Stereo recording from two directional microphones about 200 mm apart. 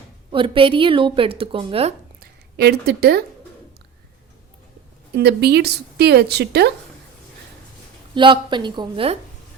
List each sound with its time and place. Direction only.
0.3 s a woman's voice: 25° right (ahead or behind)
2.2 s speech: 55° right (ahead or behind)
5.1 s a woman's voice: 55° right (ahead or behind)
8.1 s a woman's voice: 25° right (ahead or behind)